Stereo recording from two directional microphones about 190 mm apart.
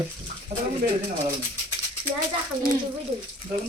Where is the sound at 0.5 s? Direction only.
40° right (ahead or behind).